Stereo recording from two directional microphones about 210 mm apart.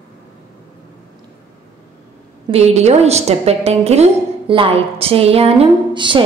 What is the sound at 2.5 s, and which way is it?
A woman's voice, 30° right (ahead or behind).